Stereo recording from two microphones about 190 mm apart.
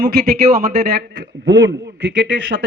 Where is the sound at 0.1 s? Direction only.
55° right (ahead or behind).